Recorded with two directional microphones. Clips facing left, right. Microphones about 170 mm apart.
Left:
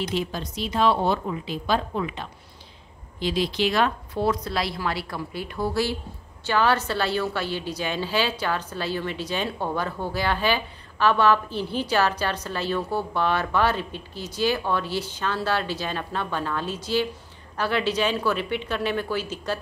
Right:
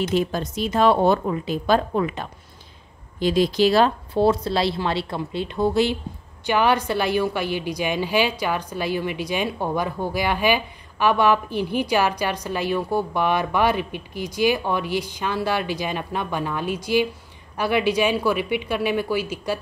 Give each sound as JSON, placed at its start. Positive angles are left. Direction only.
{"t": 0.0, "sound": "a woman's voice", "side_deg": -50}